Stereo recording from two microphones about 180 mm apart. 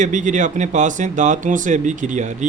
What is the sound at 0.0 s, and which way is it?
Speech, 45° right (ahead or behind).